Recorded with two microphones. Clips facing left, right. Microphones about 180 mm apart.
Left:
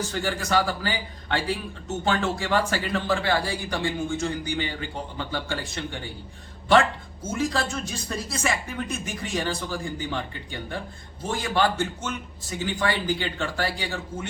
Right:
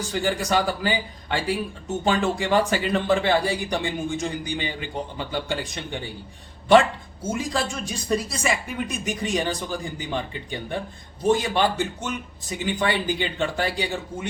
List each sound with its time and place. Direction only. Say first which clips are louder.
0.1 s a man's voice: right 5 dB; 15° right (ahead or behind)
7.3 s a man's voice: left 2 dB; 15° right (ahead or behind)